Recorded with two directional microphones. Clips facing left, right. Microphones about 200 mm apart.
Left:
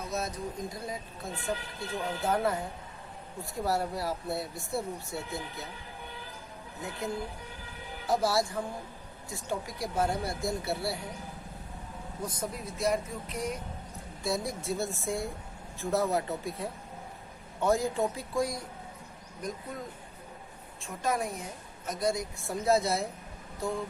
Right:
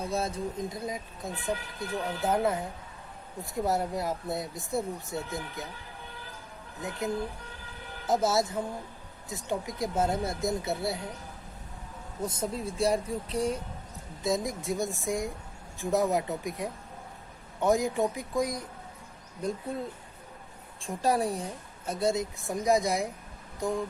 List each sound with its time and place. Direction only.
0.1 s a woman's voice: 30° right (ahead or behind)
6.8 s speech: 20° right (ahead or behind)
12.2 s speech: 25° right (ahead or behind)
14.3 s a woman's voice: 20° right (ahead or behind)
20.8 s a woman's voice: 35° right (ahead or behind); by 23.0 s 15° right (ahead or behind)
23.6 s a sound: 15° right (ahead or behind)